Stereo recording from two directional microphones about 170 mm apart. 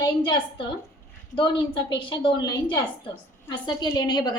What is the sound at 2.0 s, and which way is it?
A woman's voice, 30° left (ahead or behind).